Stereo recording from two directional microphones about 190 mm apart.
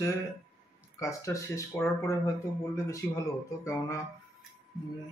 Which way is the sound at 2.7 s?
15° left (ahead or behind).